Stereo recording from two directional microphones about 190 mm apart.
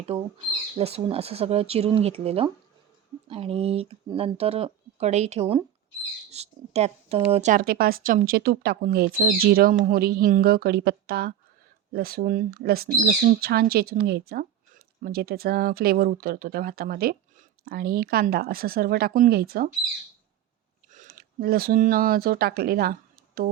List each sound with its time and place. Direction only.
0.8 s speech: 30° right (ahead or behind)
7.5 s speech: 50° right (ahead or behind)
20.9 s speech: 45° right (ahead or behind)